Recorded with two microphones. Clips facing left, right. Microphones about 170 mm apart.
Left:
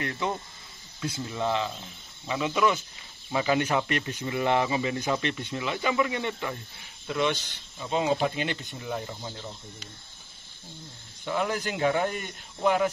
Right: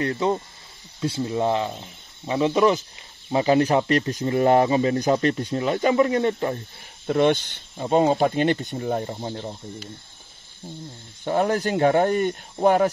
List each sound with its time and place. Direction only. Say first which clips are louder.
0.0 s speech: right 8 dB; 30° right (ahead or behind)
11.2 s speech: right 7 dB; 40° right (ahead or behind)